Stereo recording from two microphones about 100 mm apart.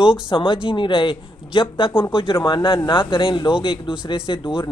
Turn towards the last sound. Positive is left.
turn(degrees=55)  # may be behind; listen again after turning